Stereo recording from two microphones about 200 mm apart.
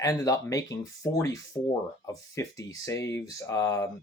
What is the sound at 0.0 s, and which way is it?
Speech, 15° left (ahead or behind).